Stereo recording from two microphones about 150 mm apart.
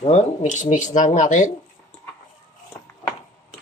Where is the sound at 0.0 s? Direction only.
50° left (ahead or behind).